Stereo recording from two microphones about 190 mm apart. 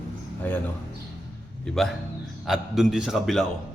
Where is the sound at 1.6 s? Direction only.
Centre (ahead or behind).